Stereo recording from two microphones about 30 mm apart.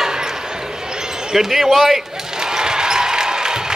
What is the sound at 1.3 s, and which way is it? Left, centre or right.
Speech, centre.